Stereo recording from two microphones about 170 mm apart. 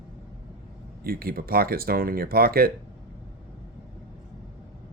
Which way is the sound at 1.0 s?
60° right (ahead or behind).